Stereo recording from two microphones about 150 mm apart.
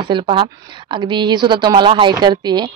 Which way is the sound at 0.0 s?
35° right (ahead or behind).